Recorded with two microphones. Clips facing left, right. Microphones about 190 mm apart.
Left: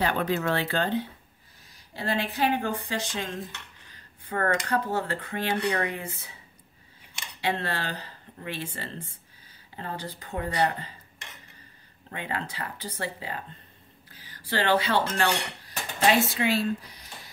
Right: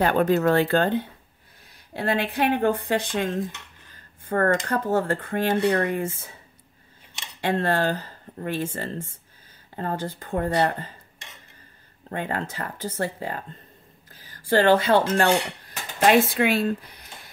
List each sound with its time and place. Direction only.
0.0 s speech: 45° right (ahead or behind)
7.4 s speech: 50° right (ahead or behind)
12.1 s speech: 45° right (ahead or behind)